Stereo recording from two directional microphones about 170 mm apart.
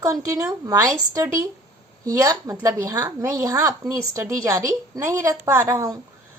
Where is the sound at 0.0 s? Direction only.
20° right (ahead or behind).